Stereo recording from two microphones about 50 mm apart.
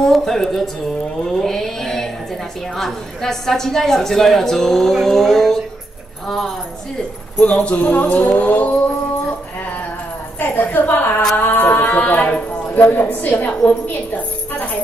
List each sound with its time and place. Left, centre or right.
0.0 s a woman's voice: centre
1.2 s a sound: centre
2.7 s a woman's voice: centre
6.2 s a sound: centre
7.4 s speech: left
10.4 s a woman's voice: left